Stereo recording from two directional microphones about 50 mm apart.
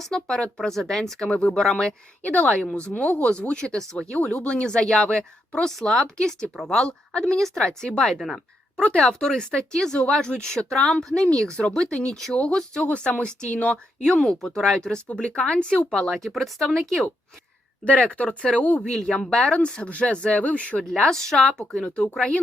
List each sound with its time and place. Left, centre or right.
0.0 s speech: centre
2.2 s speech: left
7.3 s speech: centre
12.1 s speech: centre
18.1 s speech: left
18.8 s speech: centre
20.9 s speech: centre